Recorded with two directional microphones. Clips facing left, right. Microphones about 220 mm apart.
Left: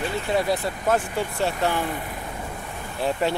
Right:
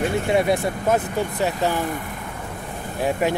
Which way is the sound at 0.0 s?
50° right (ahead or behind).